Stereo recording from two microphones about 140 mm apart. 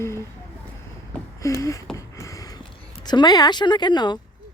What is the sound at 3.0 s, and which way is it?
Speech, 30° left (ahead or behind).